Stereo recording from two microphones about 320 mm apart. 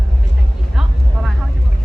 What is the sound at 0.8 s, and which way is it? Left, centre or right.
Vehicle, centre.